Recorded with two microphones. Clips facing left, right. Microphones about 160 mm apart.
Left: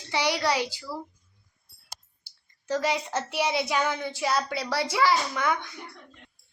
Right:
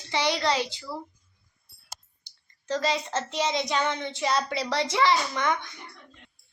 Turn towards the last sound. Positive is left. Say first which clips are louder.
# even
turn(degrees=5)  # may be behind; listen again after turning